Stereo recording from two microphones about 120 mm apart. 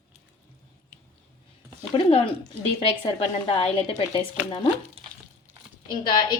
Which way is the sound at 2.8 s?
50° left (ahead or behind).